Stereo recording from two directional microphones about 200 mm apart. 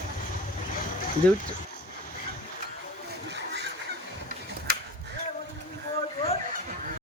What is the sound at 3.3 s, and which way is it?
Chicken, 60° right (ahead or behind).